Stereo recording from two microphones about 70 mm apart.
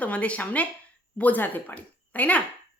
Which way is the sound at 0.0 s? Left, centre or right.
Centre.